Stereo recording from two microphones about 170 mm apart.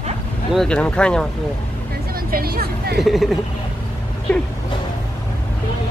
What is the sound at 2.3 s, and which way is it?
Speech, 60° right (ahead or behind).